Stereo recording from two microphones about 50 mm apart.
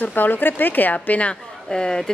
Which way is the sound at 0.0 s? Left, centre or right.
Left.